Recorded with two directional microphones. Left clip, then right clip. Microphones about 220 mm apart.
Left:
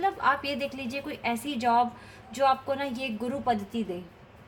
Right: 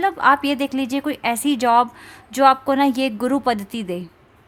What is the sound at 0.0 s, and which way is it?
A woman's voice, 50° right (ahead or behind).